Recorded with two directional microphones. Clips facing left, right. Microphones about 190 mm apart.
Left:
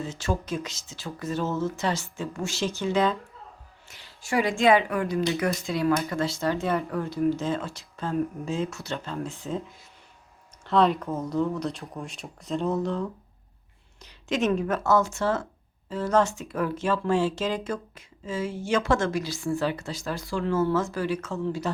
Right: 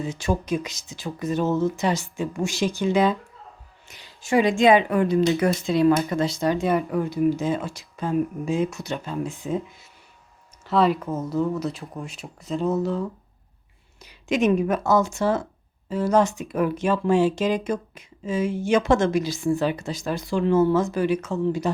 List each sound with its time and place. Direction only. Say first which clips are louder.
0.0 s speech: right 4 dB; 15° right (ahead or behind)
10.7 s speech: right 1 dB; 5° right (ahead or behind)